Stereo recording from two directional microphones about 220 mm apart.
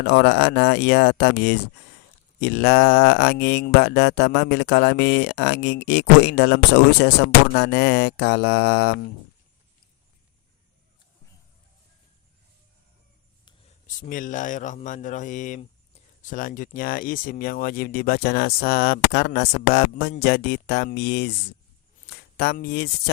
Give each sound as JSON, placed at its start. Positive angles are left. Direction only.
{"t": 0.0, "sound": "mantra", "side_deg": 50}
{"t": 13.8, "sound": "speech", "side_deg": 35}
{"t": 16.2, "sound": "mantra", "side_deg": 40}
{"t": 22.1, "sound": "speech", "side_deg": 45}